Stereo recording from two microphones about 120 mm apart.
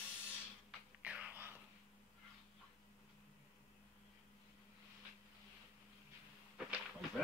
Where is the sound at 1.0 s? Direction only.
10° right (ahead or behind).